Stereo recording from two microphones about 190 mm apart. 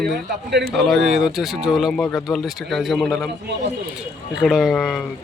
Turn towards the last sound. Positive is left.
turn(degrees=0)  # may be behind; listen again after turning